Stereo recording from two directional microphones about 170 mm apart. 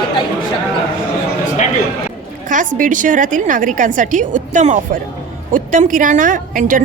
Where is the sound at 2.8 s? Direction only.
50° right (ahead or behind).